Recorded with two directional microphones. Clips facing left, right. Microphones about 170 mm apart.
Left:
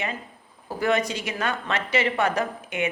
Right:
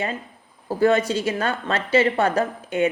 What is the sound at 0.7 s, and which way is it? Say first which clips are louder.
Speech: right 5 dB; 30° right (ahead or behind).